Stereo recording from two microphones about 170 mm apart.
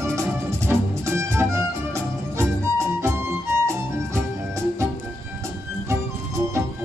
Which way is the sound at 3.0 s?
15° right (ahead or behind).